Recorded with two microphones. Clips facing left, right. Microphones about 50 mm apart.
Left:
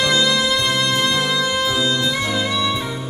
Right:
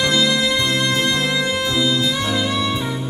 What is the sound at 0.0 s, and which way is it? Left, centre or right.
Music, left.